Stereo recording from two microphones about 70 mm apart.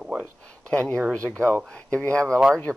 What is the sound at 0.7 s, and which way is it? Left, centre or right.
Speech, centre.